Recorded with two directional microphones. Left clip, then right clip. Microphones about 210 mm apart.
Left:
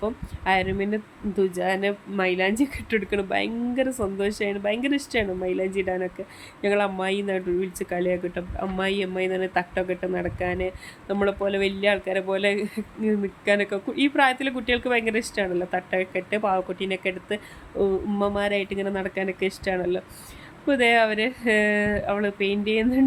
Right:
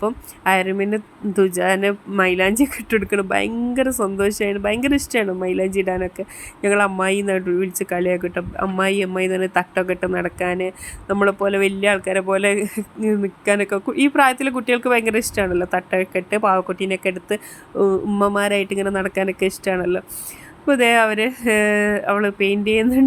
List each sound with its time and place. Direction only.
0.0 s speech: 15° right (ahead or behind)